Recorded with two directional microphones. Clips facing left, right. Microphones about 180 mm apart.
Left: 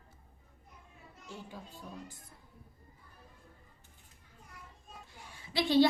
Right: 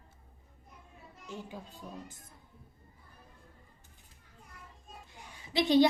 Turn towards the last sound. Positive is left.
turn(degrees=-20)  # may be behind; listen again after turning